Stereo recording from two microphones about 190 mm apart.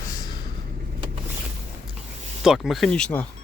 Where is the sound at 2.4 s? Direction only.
Centre (ahead or behind).